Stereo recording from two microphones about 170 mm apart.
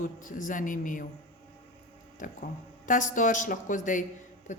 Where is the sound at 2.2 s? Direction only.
50° left (ahead or behind).